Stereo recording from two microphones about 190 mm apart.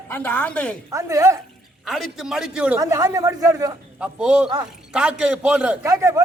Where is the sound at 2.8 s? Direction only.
20° right (ahead or behind).